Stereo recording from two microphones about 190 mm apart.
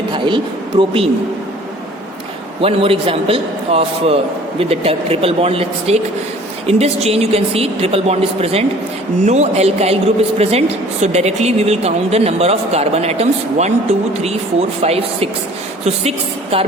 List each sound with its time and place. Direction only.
0.1 s speech: 25° right (ahead or behind)
2.6 s a man's voice: 30° right (ahead or behind)
14.8 s a woman's voice: 30° right (ahead or behind)